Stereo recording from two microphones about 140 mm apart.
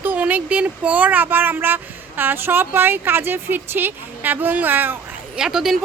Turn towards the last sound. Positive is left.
turn(degrees=-5)  # may be behind; listen again after turning